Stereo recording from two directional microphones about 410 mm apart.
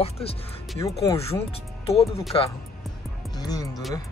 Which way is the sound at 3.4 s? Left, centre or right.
Centre.